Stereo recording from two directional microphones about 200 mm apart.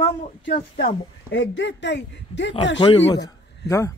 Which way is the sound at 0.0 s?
50° left (ahead or behind).